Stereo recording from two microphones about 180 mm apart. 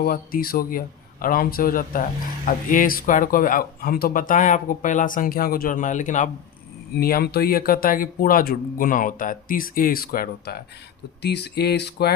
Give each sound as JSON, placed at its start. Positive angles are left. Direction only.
{"t": 0.0, "sound": "speech", "side_deg": 55}
{"t": 6.9, "sound": "speech", "side_deg": 60}
{"t": 11.2, "sound": "a sound", "side_deg": 70}